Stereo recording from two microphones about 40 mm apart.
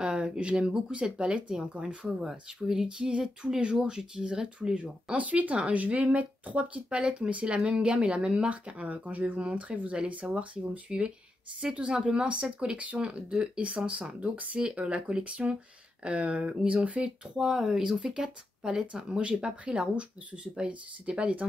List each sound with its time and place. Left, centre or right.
0.0 s speech: right
5.1 s speech: right
8.5 s speech: right
10.9 s speech: right
17.4 s speech: centre
17.8 s speech: right